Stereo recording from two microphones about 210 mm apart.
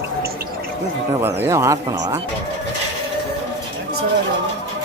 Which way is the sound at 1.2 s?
10° right (ahead or behind).